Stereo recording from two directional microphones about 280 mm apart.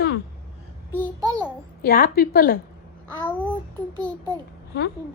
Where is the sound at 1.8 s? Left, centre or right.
Left.